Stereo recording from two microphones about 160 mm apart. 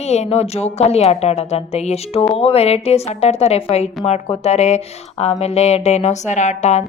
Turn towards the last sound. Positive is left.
turn(degrees=45)  # may be behind; listen again after turning